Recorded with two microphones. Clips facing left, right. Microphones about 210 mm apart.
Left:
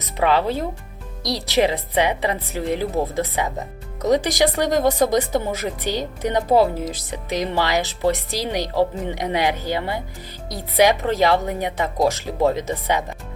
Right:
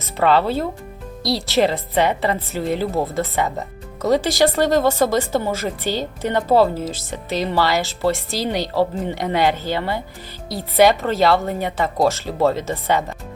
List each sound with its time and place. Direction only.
0.2 s speech: 15° left (ahead or behind)